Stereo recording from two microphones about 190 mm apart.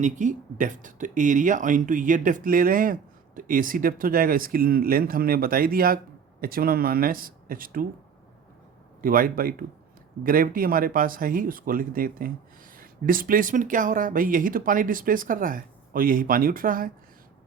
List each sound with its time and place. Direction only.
0.0 s speech: 40° right (ahead or behind)
9.0 s speech: 50° right (ahead or behind)